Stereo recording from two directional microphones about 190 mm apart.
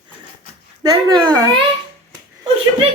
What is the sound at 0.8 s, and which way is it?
Speech, 20° right (ahead or behind).